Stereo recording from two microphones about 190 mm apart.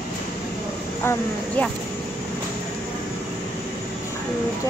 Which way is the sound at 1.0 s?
10° left (ahead or behind).